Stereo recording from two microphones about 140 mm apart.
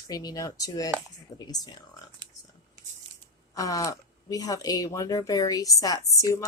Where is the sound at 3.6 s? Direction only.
25° left (ahead or behind).